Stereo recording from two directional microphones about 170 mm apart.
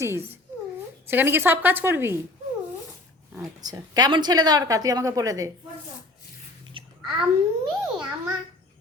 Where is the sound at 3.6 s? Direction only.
25° right (ahead or behind).